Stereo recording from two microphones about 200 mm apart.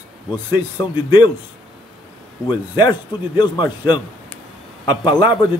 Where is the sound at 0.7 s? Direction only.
20° left (ahead or behind).